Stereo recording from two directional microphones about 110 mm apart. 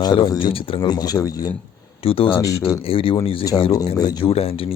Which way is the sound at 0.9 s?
35° left (ahead or behind).